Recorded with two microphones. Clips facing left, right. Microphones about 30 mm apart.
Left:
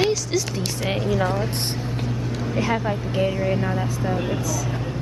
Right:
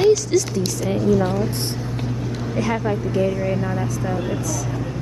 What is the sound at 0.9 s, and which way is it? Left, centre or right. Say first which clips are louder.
Speech: right 4 dB; left.